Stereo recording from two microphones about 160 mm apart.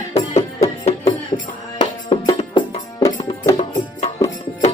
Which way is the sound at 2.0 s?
35° left (ahead or behind).